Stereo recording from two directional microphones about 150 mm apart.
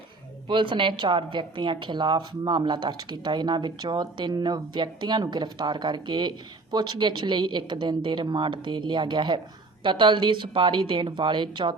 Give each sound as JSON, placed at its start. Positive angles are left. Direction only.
{"t": 0.4, "sound": "a woman's voice", "side_deg": -35}